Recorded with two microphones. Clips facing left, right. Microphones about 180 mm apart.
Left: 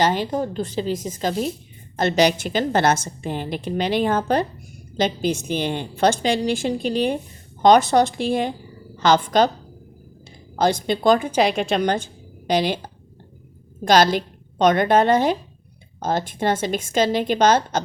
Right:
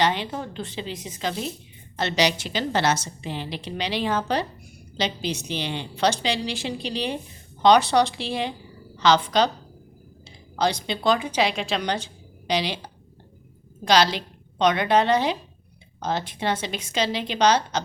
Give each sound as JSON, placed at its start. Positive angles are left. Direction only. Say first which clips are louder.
{"t": 0.0, "sound": "a woman's voice", "louder": "left 4 dB", "side_deg": 45}
{"t": 10.6, "sound": "a woman's voice", "louder": "left 5 dB", "side_deg": 50}